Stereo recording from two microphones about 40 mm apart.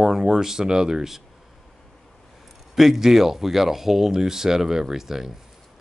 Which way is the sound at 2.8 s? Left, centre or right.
Centre.